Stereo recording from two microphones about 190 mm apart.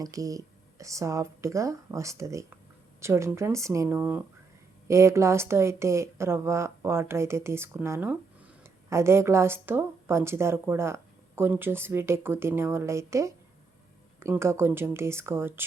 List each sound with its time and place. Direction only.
0.0 s speech: 20° right (ahead or behind)